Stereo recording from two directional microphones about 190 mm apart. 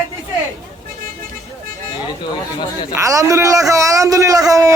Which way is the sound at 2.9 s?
15° right (ahead or behind).